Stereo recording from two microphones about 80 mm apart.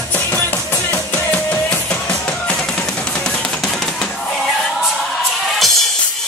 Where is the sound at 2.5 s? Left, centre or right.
Centre.